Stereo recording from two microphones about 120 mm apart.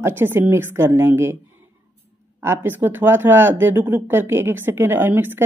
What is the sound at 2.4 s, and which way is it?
Speech, 20° right (ahead or behind).